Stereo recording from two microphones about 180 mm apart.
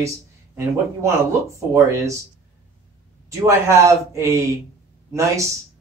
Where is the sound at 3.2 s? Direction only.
15° right (ahead or behind).